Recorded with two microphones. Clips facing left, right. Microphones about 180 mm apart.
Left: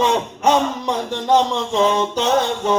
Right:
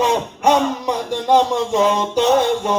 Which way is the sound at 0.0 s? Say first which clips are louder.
Right 1 dB; 10° right (ahead or behind).